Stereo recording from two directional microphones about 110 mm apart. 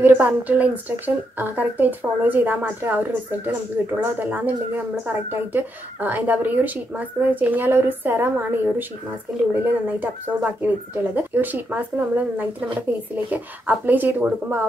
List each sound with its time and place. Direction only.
0.0 s a woman's voice: 15° right (ahead or behind)